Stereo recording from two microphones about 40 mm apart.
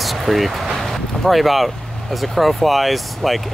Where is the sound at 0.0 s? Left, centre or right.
Centre.